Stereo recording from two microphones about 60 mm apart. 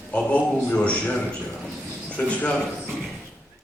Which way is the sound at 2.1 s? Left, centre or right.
Left.